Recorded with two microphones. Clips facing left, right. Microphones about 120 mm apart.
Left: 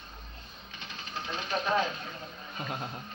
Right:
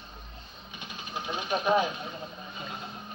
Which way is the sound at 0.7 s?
15° right (ahead or behind).